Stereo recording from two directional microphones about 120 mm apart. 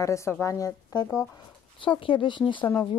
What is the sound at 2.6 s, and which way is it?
Speech, 15° left (ahead or behind).